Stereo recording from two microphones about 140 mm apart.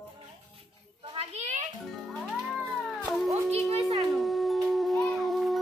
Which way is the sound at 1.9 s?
Centre (ahead or behind).